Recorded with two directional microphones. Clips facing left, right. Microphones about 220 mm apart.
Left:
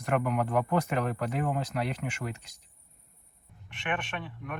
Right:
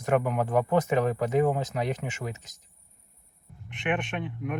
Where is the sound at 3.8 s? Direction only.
20° right (ahead or behind).